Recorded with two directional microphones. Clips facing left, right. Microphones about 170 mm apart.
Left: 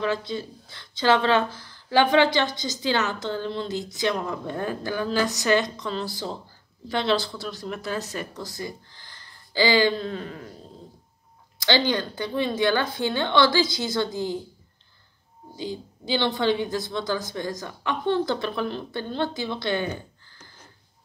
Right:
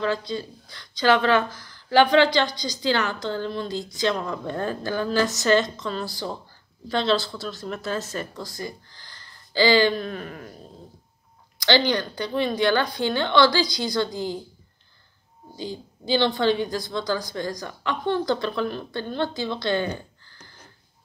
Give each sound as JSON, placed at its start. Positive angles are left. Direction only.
{"t": 0.0, "sound": "a woman's voice", "side_deg": 20}
{"t": 11.9, "sound": "speech", "side_deg": 20}
{"t": 15.5, "sound": "a sound", "side_deg": 20}
{"t": 16.3, "sound": "speech", "side_deg": 20}